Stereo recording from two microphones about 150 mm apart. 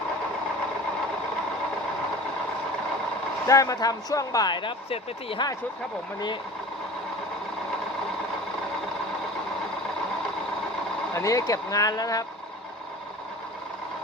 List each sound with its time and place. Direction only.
3.4 s speech: 20° left (ahead or behind)
11.1 s speech: 20° left (ahead or behind)